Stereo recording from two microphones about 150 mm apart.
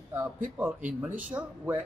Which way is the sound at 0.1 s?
10° right (ahead or behind).